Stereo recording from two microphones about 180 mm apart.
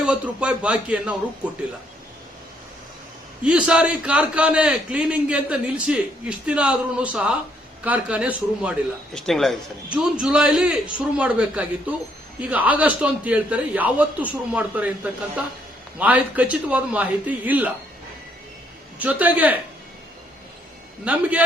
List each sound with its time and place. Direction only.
0.0 s a man's voice: 5° right (ahead or behind)
3.4 s a man's voice: 5° right (ahead or behind)
18.9 s a man's voice: 10° right (ahead or behind)
21.0 s a man's voice: 10° right (ahead or behind)